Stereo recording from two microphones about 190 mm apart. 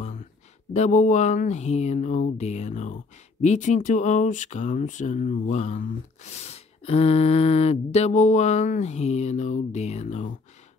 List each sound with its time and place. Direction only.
0.7 s speech: 40° left (ahead or behind)